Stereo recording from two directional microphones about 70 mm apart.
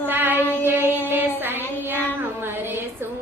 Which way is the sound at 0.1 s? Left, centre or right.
Right.